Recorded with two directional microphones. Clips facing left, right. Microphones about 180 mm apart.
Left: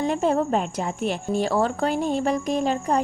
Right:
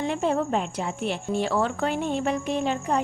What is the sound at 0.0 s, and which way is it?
Speech, 40° left (ahead or behind).